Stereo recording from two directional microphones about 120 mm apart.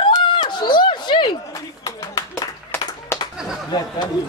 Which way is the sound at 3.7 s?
35° left (ahead or behind).